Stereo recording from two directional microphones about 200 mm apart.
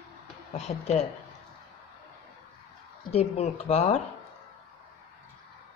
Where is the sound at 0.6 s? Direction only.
30° left (ahead or behind).